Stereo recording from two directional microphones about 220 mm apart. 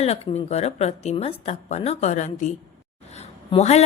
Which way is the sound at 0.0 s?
30° left (ahead or behind).